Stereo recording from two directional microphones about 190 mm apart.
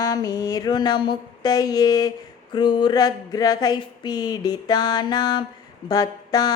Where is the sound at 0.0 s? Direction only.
20° left (ahead or behind).